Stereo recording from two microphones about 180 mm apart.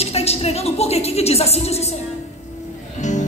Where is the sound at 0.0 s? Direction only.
35° left (ahead or behind).